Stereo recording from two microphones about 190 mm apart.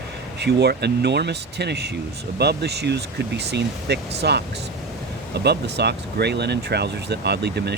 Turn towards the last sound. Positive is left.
turn(degrees=-60)  # may be behind; listen again after turning